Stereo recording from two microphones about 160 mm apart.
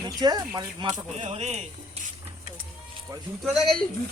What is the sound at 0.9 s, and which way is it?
Speech, 45° right (ahead or behind).